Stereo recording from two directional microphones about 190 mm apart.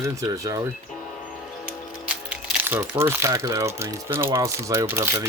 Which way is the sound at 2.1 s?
10° right (ahead or behind).